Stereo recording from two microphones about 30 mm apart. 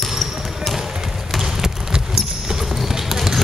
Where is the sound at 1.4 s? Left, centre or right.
Centre.